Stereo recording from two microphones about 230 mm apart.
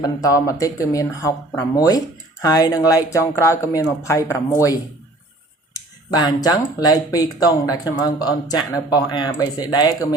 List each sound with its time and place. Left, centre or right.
0.0 s speech: centre